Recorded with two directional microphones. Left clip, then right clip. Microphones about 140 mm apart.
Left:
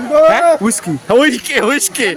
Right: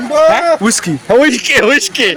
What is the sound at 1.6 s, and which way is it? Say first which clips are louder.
Speech: right 4 dB; 20° left (ahead or behind).